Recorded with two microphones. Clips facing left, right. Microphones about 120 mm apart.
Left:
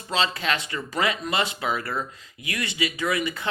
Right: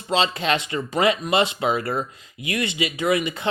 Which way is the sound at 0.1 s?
25° right (ahead or behind).